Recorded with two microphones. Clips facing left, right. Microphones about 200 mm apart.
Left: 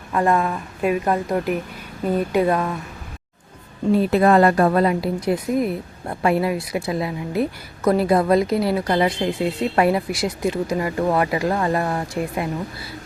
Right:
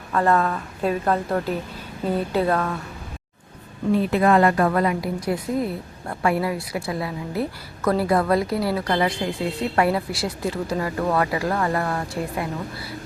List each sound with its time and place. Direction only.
0.1 s a woman's voice: 15° left (ahead or behind)
3.9 s a woman's voice: 35° left (ahead or behind); by 12.5 s 20° left (ahead or behind)